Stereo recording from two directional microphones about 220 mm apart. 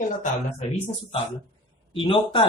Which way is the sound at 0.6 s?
25° left (ahead or behind).